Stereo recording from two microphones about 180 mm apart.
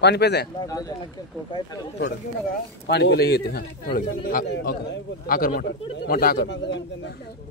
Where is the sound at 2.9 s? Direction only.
70° left (ahead or behind); by 6.4 s 55° left (ahead or behind).